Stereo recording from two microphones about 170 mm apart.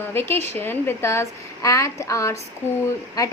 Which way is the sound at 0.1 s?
15° left (ahead or behind).